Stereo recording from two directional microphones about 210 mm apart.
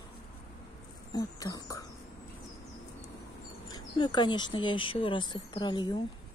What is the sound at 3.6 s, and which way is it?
Speech, 20° left (ahead or behind).